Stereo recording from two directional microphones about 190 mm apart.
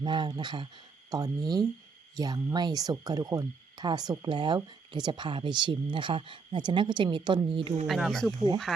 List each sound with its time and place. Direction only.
0.0 s speech: 25° right (ahead or behind)
7.9 s speech: centre (ahead or behind)